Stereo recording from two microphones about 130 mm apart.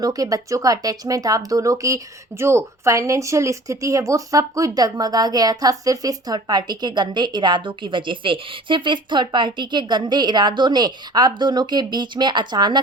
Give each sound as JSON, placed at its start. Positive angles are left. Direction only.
{"t": 0.0, "sound": "speech", "side_deg": -30}